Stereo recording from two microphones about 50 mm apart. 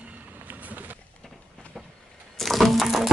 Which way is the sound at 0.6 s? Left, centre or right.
Right.